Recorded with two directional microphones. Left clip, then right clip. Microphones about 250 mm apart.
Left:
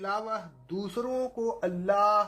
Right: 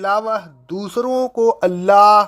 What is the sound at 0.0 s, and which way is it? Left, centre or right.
Speech, right.